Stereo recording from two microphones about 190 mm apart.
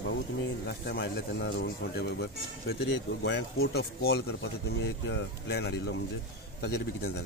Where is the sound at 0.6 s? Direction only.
60° left (ahead or behind).